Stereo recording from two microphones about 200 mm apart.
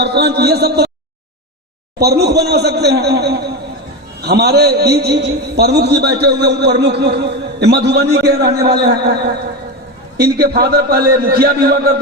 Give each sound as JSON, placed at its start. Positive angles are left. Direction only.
{"t": 0.0, "sound": "a man's voice", "side_deg": -55}
{"t": 2.0, "sound": "a man's voice", "side_deg": -55}
{"t": 10.2, "sound": "a man's voice", "side_deg": -50}